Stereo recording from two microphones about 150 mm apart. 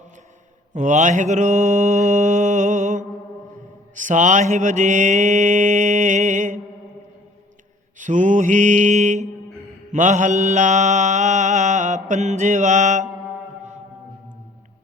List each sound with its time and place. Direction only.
0.7 s mantra: 55° right (ahead or behind)
7.9 s mantra: 55° right (ahead or behind)